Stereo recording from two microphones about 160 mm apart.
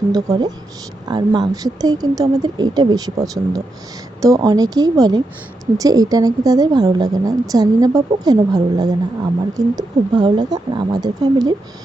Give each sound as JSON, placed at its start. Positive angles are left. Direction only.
{"t": 0.1, "sound": "speech", "side_deg": -25}